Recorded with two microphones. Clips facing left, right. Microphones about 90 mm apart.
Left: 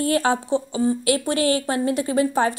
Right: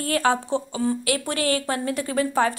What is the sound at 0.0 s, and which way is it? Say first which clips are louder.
A woman's voice: left 2 dB; 25° left (ahead or behind).